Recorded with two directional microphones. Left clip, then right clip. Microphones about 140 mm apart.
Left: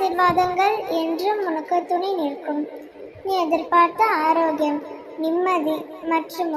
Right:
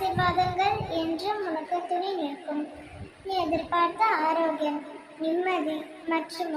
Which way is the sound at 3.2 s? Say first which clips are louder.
Left 6 dB; 35° left (ahead or behind).